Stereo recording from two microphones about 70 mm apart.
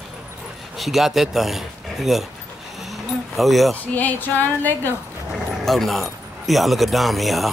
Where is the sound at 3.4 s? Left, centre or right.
Centre.